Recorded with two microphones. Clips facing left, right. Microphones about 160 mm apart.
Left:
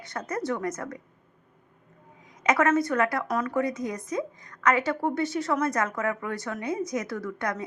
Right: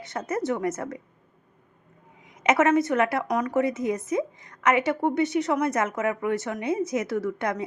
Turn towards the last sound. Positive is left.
turn(degrees=-25)  # may be behind; listen again after turning